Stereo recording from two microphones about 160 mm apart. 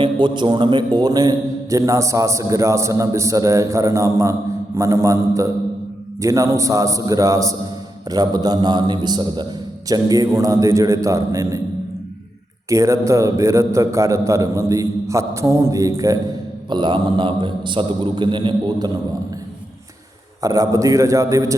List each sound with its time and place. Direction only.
0.0 s a man's voice: 30° right (ahead or behind)
12.6 s a man's voice: 20° right (ahead or behind)
20.4 s a man's voice: 20° right (ahead or behind)